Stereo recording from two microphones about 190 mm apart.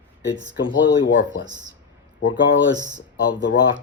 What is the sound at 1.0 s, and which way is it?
Speech, 70° left (ahead or behind).